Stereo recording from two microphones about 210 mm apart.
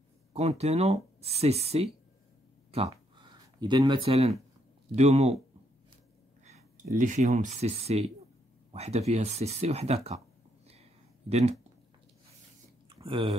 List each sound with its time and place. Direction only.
0.3 s speech: 30° right (ahead or behind)
2.9 s a sound: 20° right (ahead or behind)
4.9 s speech: 30° right (ahead or behind)
7.0 s speech: 35° right (ahead or behind)
10.7 s a sound: 30° right (ahead or behind)
13.0 s speech: 25° right (ahead or behind)